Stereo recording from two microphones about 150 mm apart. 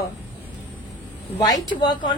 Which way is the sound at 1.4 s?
30° left (ahead or behind).